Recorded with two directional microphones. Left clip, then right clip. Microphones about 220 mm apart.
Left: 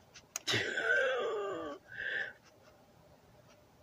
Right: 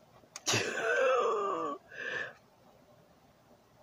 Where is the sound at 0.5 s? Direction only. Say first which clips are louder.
Right 1 dB; 35° right (ahead or behind).